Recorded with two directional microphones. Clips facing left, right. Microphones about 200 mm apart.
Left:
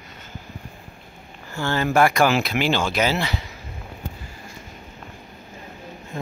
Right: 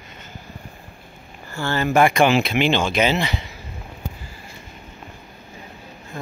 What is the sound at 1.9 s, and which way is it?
Speech, 20° right (ahead or behind).